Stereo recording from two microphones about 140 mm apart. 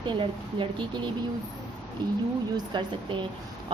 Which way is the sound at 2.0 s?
30° right (ahead or behind).